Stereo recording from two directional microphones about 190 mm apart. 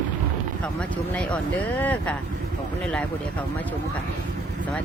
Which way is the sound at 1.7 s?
5° left (ahead or behind).